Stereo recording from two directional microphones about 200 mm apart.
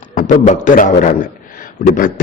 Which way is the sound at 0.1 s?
40° left (ahead or behind).